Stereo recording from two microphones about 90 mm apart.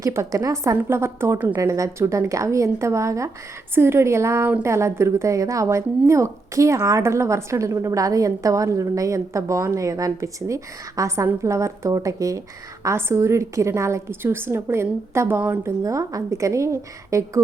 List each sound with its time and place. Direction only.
0.0 s a woman's voice: 35° right (ahead or behind)
1.5 s a woman's voice: 35° right (ahead or behind)
15.8 s a woman's voice: 40° right (ahead or behind)